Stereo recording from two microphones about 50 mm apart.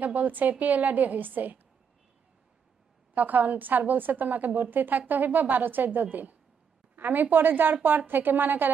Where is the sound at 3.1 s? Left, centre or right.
Right.